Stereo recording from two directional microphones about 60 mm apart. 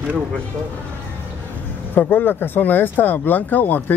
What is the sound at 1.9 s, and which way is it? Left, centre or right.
Speech, left.